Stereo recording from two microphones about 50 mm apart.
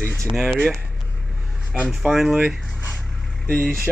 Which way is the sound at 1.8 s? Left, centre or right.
Centre.